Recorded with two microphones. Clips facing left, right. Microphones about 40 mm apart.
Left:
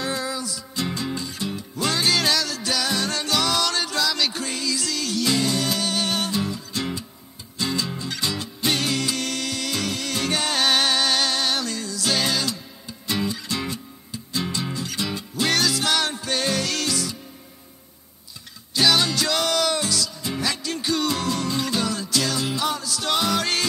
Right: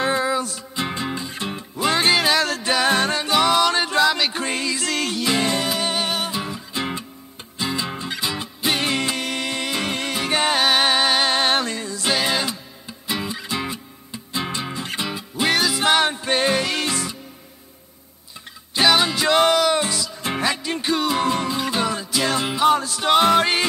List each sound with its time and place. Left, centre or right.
0.0 s music: right
2.1 s music: centre
2.4 s music: right
3.2 s music: right
5.1 s music: right
18.7 s music: right
20.2 s music: right
20.4 s music: right